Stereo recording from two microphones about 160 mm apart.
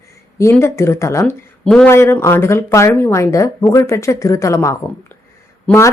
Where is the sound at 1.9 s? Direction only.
15° left (ahead or behind).